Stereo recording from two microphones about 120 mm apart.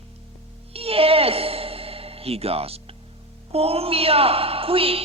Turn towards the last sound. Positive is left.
turn(degrees=-50)  # may be behind; listen again after turning